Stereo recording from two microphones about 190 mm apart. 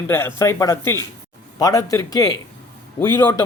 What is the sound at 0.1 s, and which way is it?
A man's voice, 15° left (ahead or behind).